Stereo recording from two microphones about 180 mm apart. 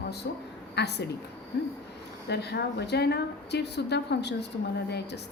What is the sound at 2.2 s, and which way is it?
A woman's voice, 65° left (ahead or behind).